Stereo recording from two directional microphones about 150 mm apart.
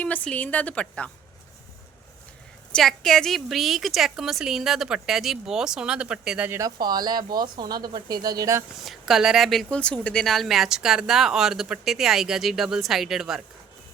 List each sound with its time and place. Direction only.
0.0 s a woman's voice: 10° left (ahead or behind)
2.7 s speech: centre (ahead or behind)
6.6 s speech: 25° right (ahead or behind)
8.8 s speech: centre (ahead or behind)